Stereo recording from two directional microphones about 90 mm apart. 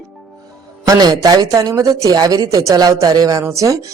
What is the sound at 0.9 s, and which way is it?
Speech, 45° right (ahead or behind).